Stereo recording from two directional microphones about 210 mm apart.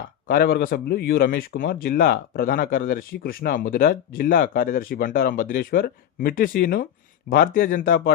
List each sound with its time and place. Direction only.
0.3 s speech: 45° left (ahead or behind)